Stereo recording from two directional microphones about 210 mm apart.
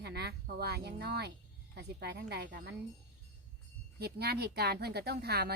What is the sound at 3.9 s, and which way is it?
Speech, 50° right (ahead or behind).